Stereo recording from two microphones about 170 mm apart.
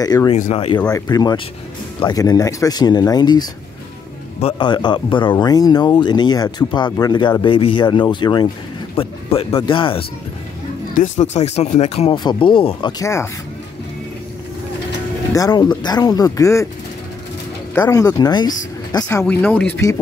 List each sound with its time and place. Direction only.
0.0 s speech: 20° left (ahead or behind)
0.3 s speech: 35° left (ahead or behind)
0.9 s speech: 20° left (ahead or behind)
11.0 s speech: 40° left (ahead or behind)
13.0 s speech: 15° left (ahead or behind)
15.3 s speech: 20° left (ahead or behind)
17.8 s speech: 20° left (ahead or behind)